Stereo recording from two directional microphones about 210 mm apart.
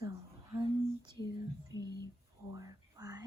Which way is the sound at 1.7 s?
20° right (ahead or behind).